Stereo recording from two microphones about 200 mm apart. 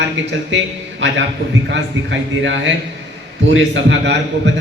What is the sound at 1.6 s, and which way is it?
A man's voice, 60° right (ahead or behind).